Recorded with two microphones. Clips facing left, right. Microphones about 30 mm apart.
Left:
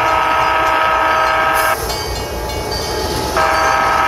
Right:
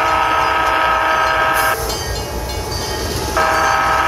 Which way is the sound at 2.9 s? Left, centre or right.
Left.